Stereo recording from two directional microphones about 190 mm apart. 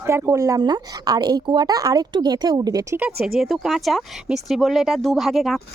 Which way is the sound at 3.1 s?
55° right (ahead or behind).